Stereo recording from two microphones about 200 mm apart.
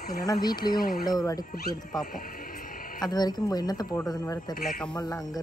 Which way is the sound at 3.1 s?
20° left (ahead or behind).